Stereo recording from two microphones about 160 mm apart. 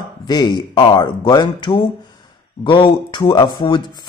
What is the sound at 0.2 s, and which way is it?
Speech, 25° left (ahead or behind).